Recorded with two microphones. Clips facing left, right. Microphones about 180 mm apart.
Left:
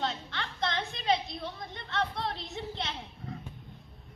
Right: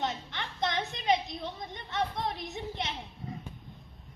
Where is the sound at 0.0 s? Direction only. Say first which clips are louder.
Even; 15° right (ahead or behind).